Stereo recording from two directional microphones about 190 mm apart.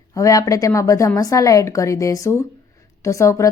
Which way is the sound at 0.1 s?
15° left (ahead or behind).